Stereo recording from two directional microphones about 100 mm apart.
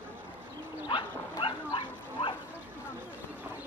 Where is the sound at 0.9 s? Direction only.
55° left (ahead or behind).